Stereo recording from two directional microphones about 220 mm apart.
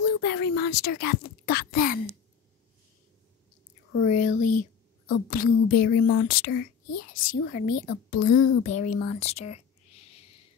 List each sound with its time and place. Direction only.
0.0 s speech: 50° left (ahead or behind)
4.0 s speech: 35° left (ahead or behind)